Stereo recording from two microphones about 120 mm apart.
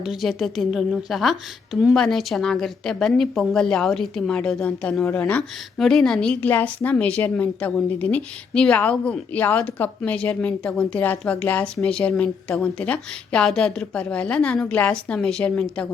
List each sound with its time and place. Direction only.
0.0 s a woman's voice: centre (ahead or behind)